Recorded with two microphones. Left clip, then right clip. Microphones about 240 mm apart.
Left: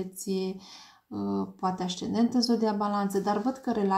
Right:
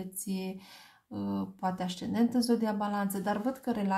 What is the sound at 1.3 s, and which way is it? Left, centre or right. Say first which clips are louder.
Speech: left 4 dB; right.